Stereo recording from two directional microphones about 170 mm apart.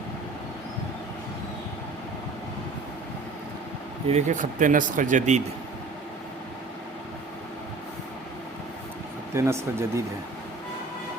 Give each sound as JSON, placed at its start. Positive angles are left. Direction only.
{"t": 4.1, "sound": "speech", "side_deg": -50}
{"t": 9.3, "sound": "speech", "side_deg": -15}